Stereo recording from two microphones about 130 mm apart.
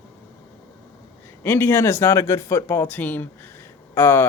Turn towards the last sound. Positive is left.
turn(degrees=20)  # may be behind; listen again after turning